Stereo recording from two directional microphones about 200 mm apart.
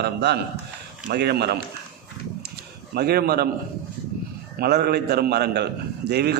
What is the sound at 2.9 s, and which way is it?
Speech, 50° right (ahead or behind).